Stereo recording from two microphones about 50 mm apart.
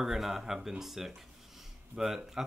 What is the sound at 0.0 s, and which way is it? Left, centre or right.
Speech, centre.